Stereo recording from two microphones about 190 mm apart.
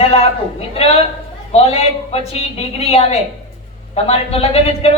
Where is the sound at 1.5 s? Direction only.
30° left (ahead or behind).